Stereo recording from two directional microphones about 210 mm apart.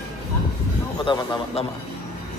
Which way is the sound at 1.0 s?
20° left (ahead or behind).